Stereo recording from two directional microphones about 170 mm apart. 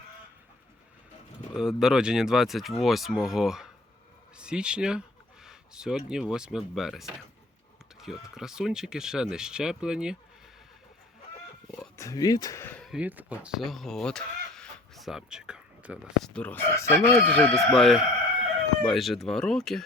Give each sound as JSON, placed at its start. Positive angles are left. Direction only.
{"t": 1.5, "sound": "speech", "side_deg": -5}
{"t": 11.9, "sound": "speech", "side_deg": 20}
{"t": 12.8, "sound": "speech", "side_deg": -5}
{"t": 16.3, "sound": "chicken", "side_deg": 10}
{"t": 18.9, "sound": "speech", "side_deg": 0}